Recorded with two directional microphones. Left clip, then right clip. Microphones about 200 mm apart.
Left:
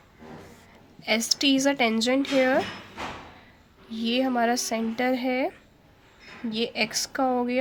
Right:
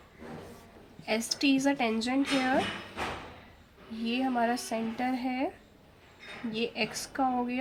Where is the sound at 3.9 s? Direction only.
50° left (ahead or behind).